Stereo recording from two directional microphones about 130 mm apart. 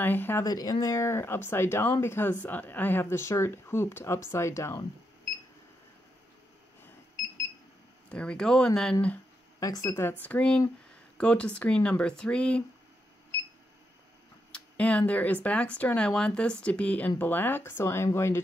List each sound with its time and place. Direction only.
0.0 s speech: 15° left (ahead or behind)
0.5 s speech: 30° left (ahead or behind)
8.1 s speech: 5° left (ahead or behind)
9.6 s speech: 25° left (ahead or behind)
10.2 s speech: 10° left (ahead or behind)
14.5 s speech: 10° left (ahead or behind)